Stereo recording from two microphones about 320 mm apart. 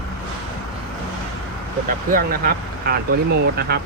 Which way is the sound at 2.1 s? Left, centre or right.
Right.